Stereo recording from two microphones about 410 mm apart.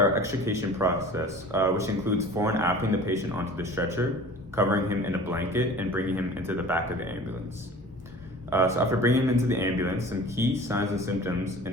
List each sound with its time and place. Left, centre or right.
0.2 s speech: centre
8.4 s speech: centre